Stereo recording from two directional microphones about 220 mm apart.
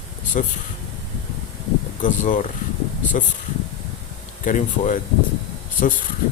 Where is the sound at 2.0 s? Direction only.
35° left (ahead or behind).